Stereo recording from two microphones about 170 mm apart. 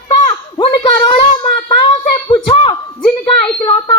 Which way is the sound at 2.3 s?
30° left (ahead or behind).